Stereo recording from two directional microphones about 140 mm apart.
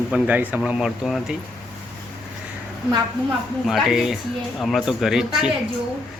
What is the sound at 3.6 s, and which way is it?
A man's voice, centre (ahead or behind).